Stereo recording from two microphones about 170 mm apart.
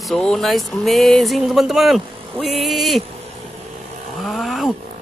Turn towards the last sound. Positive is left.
turn(degrees=0)  # may be behind; listen again after turning